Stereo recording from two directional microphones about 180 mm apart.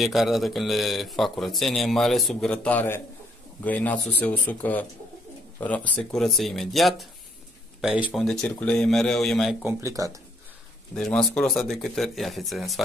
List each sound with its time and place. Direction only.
0.0 s a man's voice: centre (ahead or behind); by 10.1 s 15° right (ahead or behind)
11.0 s a man's voice: 5° left (ahead or behind)